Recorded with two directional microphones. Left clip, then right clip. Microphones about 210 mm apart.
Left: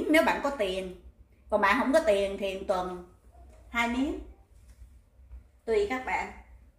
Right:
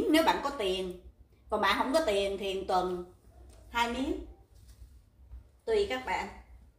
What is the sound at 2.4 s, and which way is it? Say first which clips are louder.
Speech: left 1 dB; 20° left (ahead or behind).